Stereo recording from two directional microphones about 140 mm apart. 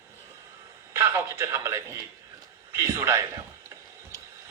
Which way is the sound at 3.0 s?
20° right (ahead or behind).